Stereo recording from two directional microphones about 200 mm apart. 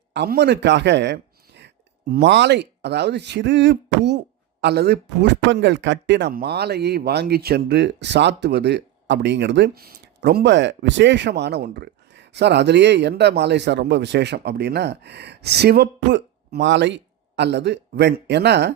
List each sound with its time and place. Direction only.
0.1 s speech: 55° right (ahead or behind)